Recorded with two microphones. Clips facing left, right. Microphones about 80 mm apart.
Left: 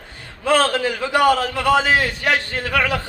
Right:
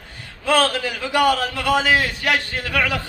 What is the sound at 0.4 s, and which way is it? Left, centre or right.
A man's voice, left.